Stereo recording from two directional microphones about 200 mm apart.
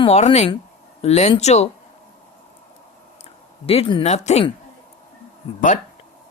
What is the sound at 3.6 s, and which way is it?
Speech, 30° left (ahead or behind).